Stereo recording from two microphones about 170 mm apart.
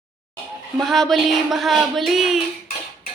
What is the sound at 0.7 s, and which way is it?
A woman's voice, centre (ahead or behind).